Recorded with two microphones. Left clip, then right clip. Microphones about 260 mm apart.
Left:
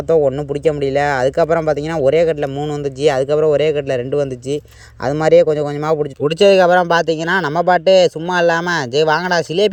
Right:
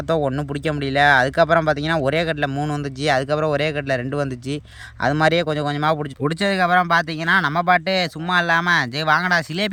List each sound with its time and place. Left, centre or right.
0.3 s speech: centre
5.6 s speech: right
6.2 s speech: centre